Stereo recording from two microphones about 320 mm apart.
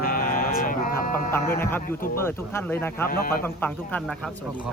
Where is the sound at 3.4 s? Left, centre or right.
Centre.